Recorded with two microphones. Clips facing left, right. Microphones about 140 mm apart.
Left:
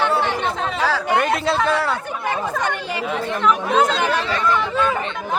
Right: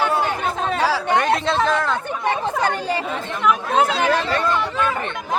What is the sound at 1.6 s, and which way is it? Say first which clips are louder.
Speech: even; 5° left (ahead or behind).